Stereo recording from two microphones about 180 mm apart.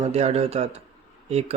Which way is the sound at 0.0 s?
35° right (ahead or behind).